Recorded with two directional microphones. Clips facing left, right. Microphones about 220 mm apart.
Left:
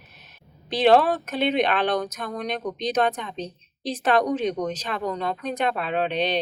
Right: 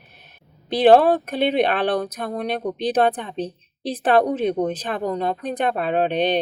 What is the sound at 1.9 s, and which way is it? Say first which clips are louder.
Speech: right 3 dB; 30° right (ahead or behind).